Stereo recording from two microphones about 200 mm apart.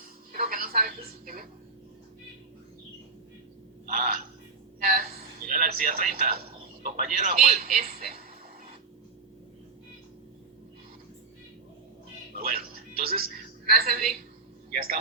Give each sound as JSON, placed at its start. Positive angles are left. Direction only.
{"t": 0.3, "sound": "television", "side_deg": -45}
{"t": 3.8, "sound": "speech", "side_deg": -40}
{"t": 4.8, "sound": "a sound", "side_deg": -45}
{"t": 6.8, "sound": "speech", "side_deg": -40}
{"t": 12.4, "sound": "music", "side_deg": -45}
{"t": 13.7, "sound": "speech", "side_deg": -50}